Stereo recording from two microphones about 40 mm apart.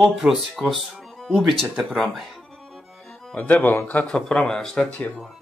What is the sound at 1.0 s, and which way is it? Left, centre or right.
Music, centre.